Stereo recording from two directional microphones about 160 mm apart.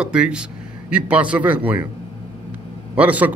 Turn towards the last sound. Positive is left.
turn(degrees=-10)  # may be behind; listen again after turning